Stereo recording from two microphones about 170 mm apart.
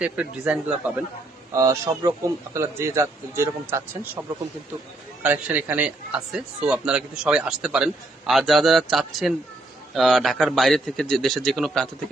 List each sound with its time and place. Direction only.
0.0 s a man's voice: 5° right (ahead or behind)
1.5 s a man's voice: 20° right (ahead or behind)
5.2 s a man's voice: 10° right (ahead or behind)